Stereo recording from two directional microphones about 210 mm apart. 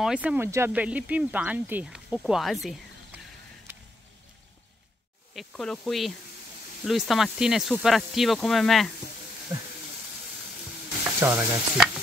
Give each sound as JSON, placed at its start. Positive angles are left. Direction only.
{"t": 0.0, "sound": "speech", "side_deg": -5}
{"t": 5.3, "sound": "speech", "side_deg": 0}
{"t": 9.5, "sound": "speech", "side_deg": -15}
{"t": 11.1, "sound": "frying", "side_deg": -10}